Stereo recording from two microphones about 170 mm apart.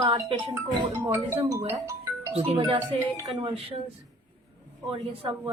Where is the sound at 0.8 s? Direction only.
20° right (ahead or behind).